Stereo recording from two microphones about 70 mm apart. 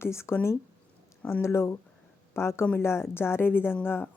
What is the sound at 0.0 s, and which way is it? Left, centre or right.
Speech, left.